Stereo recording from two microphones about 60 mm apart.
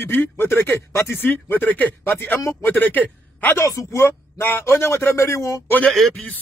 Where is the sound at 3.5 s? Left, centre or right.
Left.